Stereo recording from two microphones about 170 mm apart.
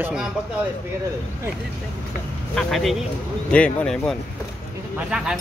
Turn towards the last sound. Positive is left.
turn(degrees=-5)  # may be behind; listen again after turning